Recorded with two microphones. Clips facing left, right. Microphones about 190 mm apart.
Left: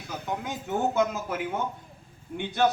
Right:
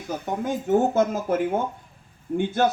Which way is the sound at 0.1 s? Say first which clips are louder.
Right 6 dB; 45° right (ahead or behind).